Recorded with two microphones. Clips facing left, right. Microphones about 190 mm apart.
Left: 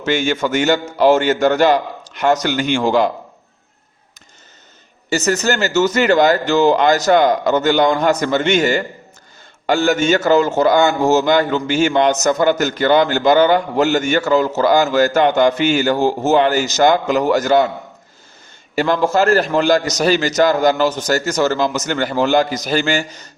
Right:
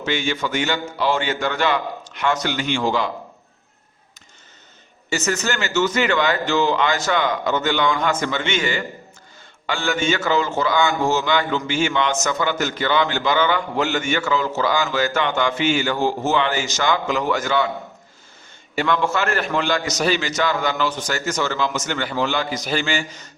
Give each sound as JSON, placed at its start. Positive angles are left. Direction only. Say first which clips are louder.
{"t": 0.0, "sound": "a man's voice", "louder": "left 6 dB", "side_deg": 45}
{"t": 5.0, "sound": "a man's voice", "louder": "left 6 dB", "side_deg": 40}
{"t": 18.8, "sound": "a man's voice", "louder": "left 6 dB", "side_deg": 35}